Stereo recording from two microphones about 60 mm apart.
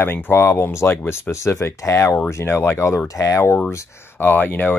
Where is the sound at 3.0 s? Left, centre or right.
Left.